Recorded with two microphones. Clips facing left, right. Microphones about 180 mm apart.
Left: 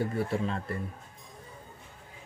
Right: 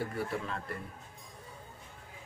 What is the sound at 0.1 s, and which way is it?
Speech, 25° left (ahead or behind).